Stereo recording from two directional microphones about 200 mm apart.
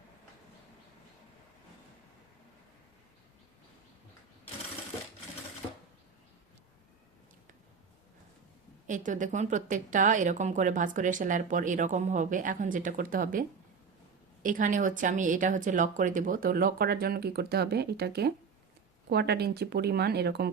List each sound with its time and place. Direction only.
8.9 s speech: 40° right (ahead or behind)
14.4 s speech: 40° right (ahead or behind)